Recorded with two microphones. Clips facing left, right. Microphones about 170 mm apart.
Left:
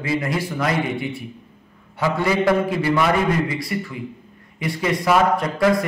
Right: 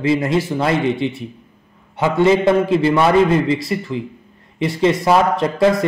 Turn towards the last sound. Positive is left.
turn(degrees=-25)  # may be behind; listen again after turning